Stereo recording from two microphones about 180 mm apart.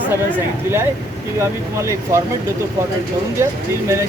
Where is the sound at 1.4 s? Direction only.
15° right (ahead or behind).